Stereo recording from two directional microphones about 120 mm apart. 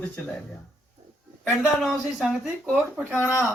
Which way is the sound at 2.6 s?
15° right (ahead or behind).